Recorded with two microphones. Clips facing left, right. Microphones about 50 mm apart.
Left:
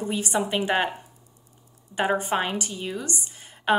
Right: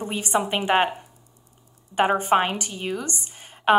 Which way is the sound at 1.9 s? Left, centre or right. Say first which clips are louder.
Right 5 dB; right.